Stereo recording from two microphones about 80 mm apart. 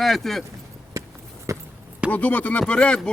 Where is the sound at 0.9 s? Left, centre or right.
Right.